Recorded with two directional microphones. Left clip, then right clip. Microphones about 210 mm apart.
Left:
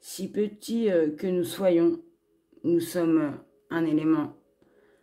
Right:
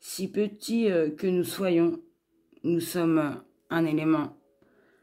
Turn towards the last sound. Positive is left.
turn(degrees=-25)  # may be behind; listen again after turning